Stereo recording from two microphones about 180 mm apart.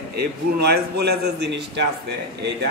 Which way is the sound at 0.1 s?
65° right (ahead or behind).